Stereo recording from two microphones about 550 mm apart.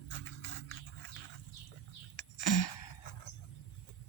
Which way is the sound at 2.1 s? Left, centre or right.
Left.